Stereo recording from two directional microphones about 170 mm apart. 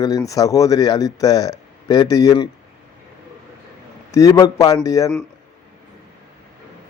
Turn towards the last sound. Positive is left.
turn(degrees=20)  # may be behind; listen again after turning